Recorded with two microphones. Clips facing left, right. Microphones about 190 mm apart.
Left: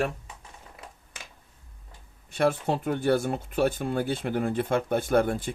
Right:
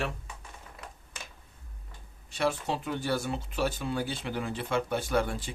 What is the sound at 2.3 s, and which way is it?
A man's voice, 55° left (ahead or behind).